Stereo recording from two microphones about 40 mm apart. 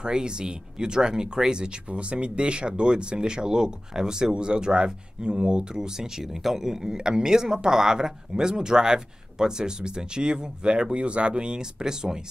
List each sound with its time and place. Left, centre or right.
0.0 s speech: right